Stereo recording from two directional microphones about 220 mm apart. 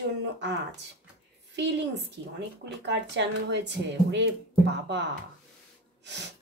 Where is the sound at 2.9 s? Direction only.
50° right (ahead or behind).